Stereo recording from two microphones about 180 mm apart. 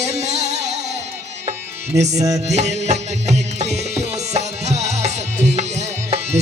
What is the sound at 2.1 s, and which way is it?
Music, 20° right (ahead or behind).